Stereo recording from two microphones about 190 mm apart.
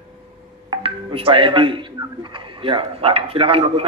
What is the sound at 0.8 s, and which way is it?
A man's voice, 30° right (ahead or behind).